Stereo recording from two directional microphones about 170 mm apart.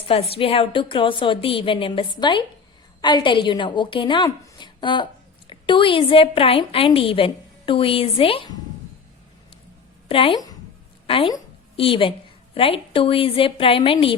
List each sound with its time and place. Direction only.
0.1 s a woman's voice: 35° left (ahead or behind)
10.1 s a woman's voice: 30° left (ahead or behind)